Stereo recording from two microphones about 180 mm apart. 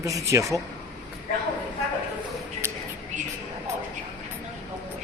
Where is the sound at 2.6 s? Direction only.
15° right (ahead or behind).